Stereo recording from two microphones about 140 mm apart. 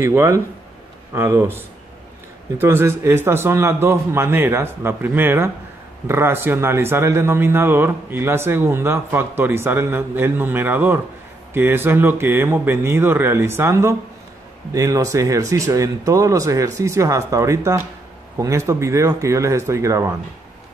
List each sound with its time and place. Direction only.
0.0 s a man's voice: 20° right (ahead or behind)